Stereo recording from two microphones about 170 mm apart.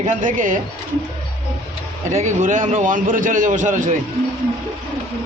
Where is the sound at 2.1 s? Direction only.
45° right (ahead or behind).